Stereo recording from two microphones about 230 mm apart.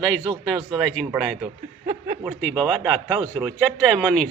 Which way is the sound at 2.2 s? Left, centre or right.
Centre.